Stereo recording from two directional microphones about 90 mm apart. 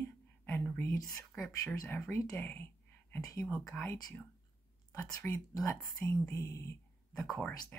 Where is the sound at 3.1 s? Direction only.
35° left (ahead or behind).